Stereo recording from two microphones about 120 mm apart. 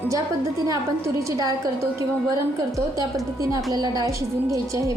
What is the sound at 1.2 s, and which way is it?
Speech, 30° right (ahead or behind).